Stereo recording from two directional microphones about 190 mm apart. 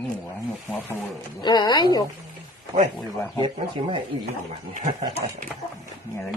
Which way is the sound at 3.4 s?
25° right (ahead or behind).